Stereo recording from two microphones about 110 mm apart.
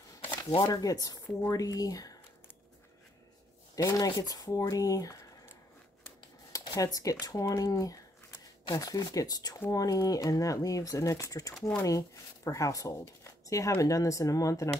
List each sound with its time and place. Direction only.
0.6 s speech: 35° left (ahead or behind)
3.7 s speech: 35° left (ahead or behind)
6.5 s speech: 30° left (ahead or behind)